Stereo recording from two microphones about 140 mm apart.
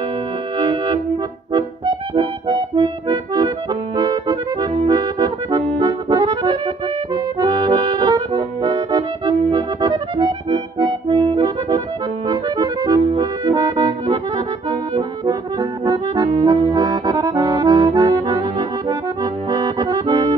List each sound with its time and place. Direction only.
0.6 s music: 35° right (ahead or behind)
1.5 s accordion: 35° right (ahead or behind)